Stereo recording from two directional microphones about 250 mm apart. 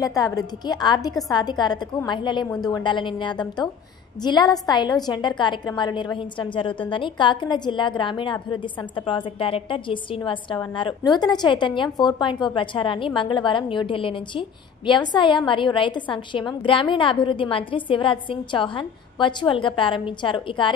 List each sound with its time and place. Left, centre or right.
0.0 s a woman's voice: centre